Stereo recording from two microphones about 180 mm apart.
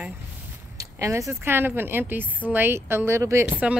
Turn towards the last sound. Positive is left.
turn(degrees=-10)  # may be behind; listen again after turning